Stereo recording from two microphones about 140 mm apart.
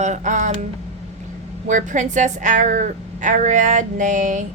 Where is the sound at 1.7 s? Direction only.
60° right (ahead or behind).